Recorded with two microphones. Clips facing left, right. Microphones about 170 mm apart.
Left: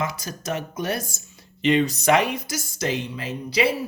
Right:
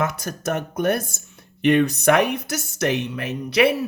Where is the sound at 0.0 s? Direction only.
60° right (ahead or behind).